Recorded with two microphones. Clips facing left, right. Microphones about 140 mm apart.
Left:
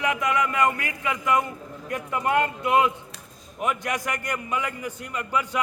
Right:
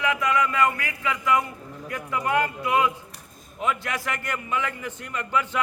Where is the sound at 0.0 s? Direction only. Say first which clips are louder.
Right 1 dB; 20° left (ahead or behind).